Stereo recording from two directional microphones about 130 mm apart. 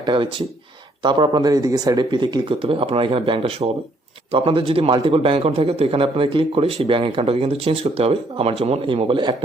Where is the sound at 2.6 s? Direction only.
45° right (ahead or behind).